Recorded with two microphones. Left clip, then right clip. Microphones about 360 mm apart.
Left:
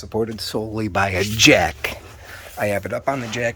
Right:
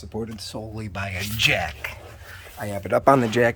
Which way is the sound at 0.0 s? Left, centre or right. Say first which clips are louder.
Left 9 dB; centre.